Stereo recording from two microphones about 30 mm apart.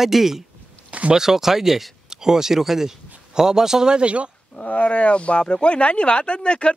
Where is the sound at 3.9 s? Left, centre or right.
Right.